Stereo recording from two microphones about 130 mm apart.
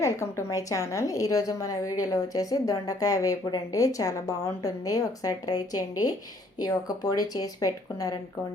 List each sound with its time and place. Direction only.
0.0 s a woman's voice: 20° left (ahead or behind)